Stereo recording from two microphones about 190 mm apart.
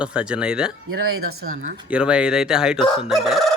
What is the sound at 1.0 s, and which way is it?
Speech, 90° right.